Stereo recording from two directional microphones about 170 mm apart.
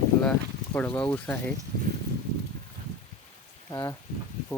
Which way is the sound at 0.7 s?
10° left (ahead or behind).